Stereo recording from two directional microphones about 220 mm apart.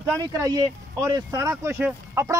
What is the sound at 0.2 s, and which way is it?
Speech, 15° right (ahead or behind).